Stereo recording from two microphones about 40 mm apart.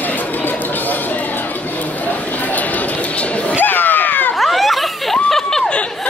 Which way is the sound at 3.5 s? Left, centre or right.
Left.